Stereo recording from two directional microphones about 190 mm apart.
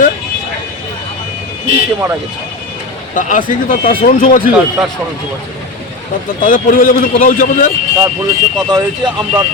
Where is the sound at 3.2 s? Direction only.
45° left (ahead or behind).